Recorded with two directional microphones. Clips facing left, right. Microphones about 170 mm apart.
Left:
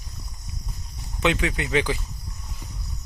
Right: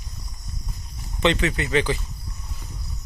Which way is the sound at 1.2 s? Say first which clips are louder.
Right 2 dB; 10° left (ahead or behind).